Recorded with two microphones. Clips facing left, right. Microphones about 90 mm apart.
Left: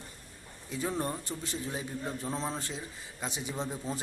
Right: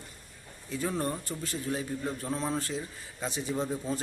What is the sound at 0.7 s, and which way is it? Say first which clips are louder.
Speech: right 2 dB; 15° left (ahead or behind).